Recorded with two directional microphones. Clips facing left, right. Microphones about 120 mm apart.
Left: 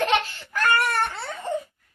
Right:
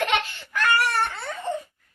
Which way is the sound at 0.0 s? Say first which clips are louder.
Left 2 dB; 35° left (ahead or behind).